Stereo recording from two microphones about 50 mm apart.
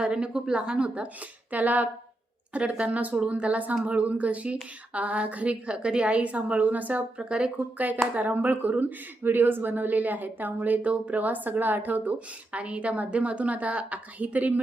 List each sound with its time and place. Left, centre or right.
0.0 s a woman's voice: centre
7.2 s a woman's voice: centre
8.1 s speech: right